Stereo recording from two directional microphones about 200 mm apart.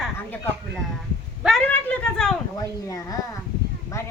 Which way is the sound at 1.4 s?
Centre (ahead or behind).